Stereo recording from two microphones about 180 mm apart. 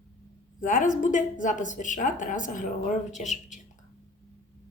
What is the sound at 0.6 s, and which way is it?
A woman's voice, 45° left (ahead or behind).